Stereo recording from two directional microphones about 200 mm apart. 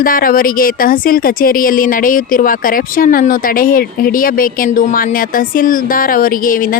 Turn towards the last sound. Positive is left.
turn(degrees=45)  # may be behind; listen again after turning